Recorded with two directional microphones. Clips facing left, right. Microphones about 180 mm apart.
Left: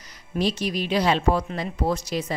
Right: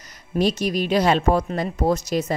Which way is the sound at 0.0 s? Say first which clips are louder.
Right 4 dB; 45° right (ahead or behind).